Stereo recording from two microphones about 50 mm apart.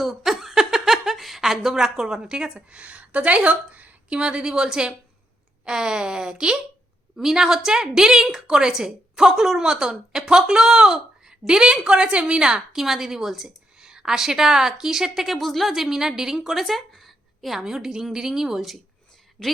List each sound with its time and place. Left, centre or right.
0.0 s a sound: centre
2.3 s a woman's voice: centre
15.7 s a woman's voice: centre